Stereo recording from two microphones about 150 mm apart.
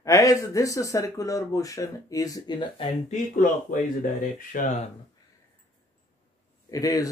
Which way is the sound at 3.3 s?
65° left (ahead or behind).